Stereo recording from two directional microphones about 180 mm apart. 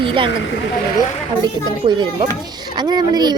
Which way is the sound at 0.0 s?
30° right (ahead or behind).